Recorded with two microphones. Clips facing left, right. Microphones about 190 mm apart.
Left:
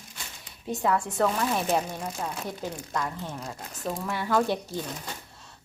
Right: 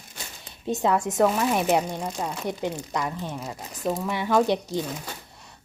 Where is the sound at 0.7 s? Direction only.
20° right (ahead or behind).